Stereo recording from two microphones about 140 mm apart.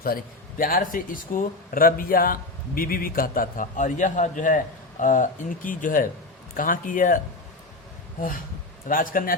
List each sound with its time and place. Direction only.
0.6 s speech: 85° left; by 7.2 s 70° left (ahead or behind)
8.9 s a man's voice: 85° left